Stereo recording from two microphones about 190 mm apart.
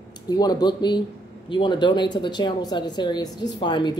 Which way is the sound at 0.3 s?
20° left (ahead or behind).